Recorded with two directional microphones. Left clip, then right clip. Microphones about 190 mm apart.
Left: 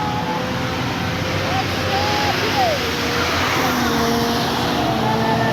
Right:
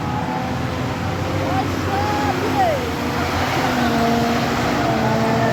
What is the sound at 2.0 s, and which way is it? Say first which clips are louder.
Vehicle: left 1 dB; 55° right (ahead or behind).